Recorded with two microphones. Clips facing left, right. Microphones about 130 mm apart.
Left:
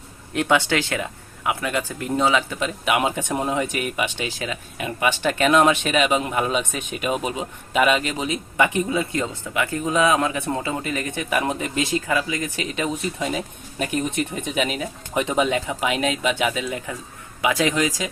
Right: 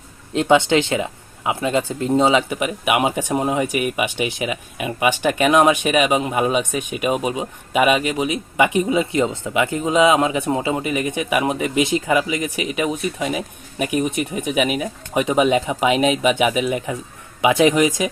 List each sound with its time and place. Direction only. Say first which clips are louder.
0.3 s speech: right 5 dB; 20° right (ahead or behind)